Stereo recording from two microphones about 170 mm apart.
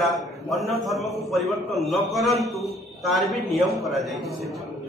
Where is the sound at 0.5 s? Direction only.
Centre (ahead or behind).